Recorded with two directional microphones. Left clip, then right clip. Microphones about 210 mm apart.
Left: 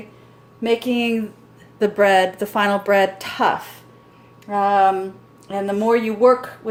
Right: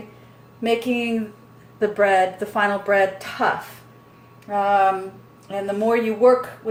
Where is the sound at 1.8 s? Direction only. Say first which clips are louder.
Left 2 dB; 50° left (ahead or behind).